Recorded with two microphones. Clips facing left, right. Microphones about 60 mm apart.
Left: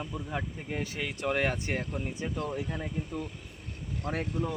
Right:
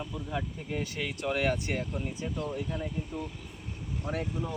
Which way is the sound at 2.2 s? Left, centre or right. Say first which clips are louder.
Left 1 dB; left.